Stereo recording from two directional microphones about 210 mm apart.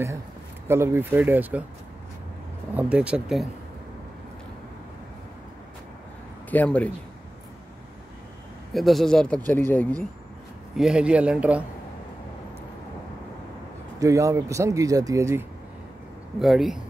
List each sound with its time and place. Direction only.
0.7 s speech: 10° right (ahead or behind)
2.7 s speech: 5° right (ahead or behind)
6.5 s speech: 5° left (ahead or behind)
8.7 s speech: centre (ahead or behind)
10.8 s speech: 5° right (ahead or behind)
13.9 s speech: 15° right (ahead or behind)
16.3 s speech: centre (ahead or behind)